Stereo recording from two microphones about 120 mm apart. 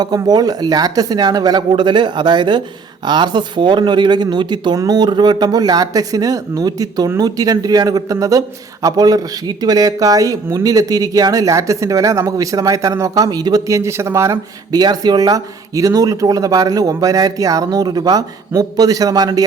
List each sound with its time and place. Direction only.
0.0 s speech: 35° right (ahead or behind)